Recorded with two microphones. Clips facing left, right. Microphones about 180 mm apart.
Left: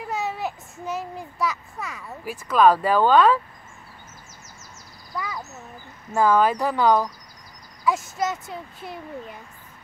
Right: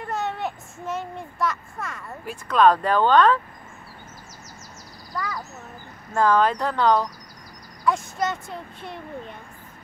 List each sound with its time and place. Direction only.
0.0 s a child's voice: centre (ahead or behind)
5.1 s speech: 20° left (ahead or behind)
6.1 s speech: 5° left (ahead or behind)